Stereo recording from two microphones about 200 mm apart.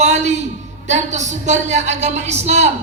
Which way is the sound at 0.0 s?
35° right (ahead or behind).